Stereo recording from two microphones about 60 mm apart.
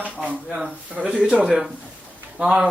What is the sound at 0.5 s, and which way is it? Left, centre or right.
Speech, right.